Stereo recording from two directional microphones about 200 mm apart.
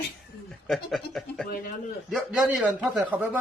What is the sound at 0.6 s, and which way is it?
Speech, centre (ahead or behind).